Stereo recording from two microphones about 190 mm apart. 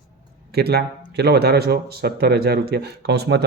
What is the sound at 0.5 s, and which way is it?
A man's voice, 60° right (ahead or behind).